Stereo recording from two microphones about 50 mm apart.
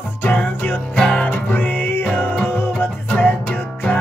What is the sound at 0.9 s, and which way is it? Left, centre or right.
Music, centre.